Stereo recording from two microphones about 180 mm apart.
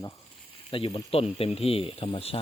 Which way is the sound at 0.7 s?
25° left (ahead or behind).